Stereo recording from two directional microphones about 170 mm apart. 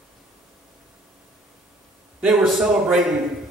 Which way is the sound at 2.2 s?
5° right (ahead or behind).